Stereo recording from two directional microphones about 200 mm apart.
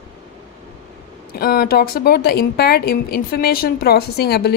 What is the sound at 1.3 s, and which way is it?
A woman's voice, 50° left (ahead or behind).